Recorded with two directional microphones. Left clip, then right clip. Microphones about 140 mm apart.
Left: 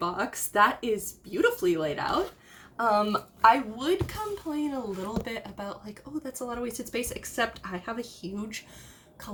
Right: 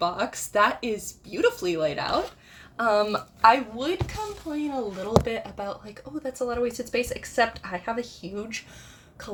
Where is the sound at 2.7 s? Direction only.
40° right (ahead or behind).